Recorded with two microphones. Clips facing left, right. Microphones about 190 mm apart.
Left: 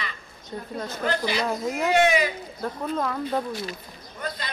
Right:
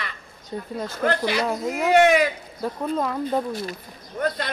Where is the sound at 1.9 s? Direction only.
55° right (ahead or behind).